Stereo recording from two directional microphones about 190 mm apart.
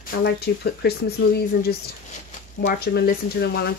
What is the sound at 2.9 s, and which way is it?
Speech, 55° left (ahead or behind).